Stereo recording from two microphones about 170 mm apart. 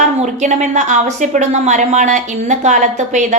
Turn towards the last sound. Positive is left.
turn(degrees=-45)  # may be behind; listen again after turning